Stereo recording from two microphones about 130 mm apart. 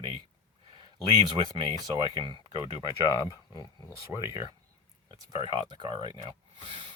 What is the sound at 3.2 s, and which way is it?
Speech, 30° left (ahead or behind).